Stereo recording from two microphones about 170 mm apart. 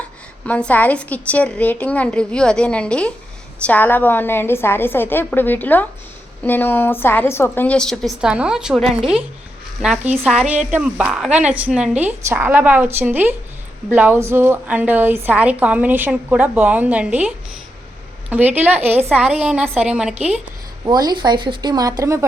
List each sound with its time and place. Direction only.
0.4 s a woman's voice: 10° left (ahead or behind); by 20.5 s 5° right (ahead or behind)
20.8 s speech: 25° right (ahead or behind)